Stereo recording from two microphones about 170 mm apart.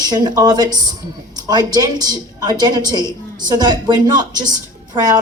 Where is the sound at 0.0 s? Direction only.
25° right (ahead or behind).